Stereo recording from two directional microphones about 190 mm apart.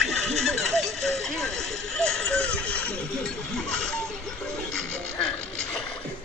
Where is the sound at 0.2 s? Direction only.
Centre (ahead or behind).